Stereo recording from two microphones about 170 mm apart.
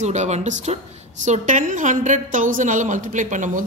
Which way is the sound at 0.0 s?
40° right (ahead or behind).